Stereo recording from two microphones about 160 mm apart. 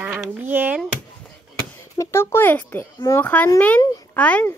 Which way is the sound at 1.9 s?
15° left (ahead or behind).